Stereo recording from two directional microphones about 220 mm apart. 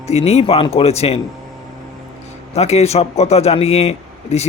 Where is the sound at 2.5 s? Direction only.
30° left (ahead or behind).